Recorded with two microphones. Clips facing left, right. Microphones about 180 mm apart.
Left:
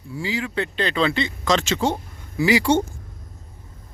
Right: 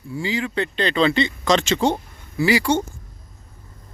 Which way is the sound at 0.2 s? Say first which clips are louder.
Right 2 dB; 5° left (ahead or behind).